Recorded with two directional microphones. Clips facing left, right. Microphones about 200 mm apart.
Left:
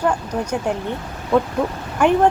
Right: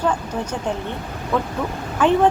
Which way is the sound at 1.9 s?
10° left (ahead or behind).